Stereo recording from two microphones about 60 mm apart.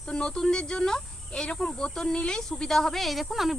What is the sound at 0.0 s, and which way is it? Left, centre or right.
Speech, centre.